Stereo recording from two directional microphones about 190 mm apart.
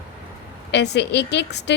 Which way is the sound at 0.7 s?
65° left (ahead or behind).